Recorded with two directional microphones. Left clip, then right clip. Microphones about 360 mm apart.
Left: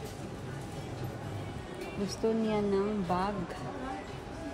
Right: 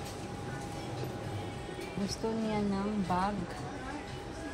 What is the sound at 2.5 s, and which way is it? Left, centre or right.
Speech, centre.